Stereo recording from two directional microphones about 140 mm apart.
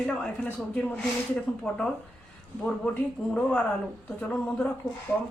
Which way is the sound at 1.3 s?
5° left (ahead or behind).